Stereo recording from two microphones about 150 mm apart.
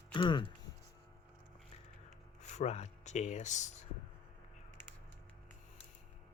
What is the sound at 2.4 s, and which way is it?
Speech, 50° left (ahead or behind).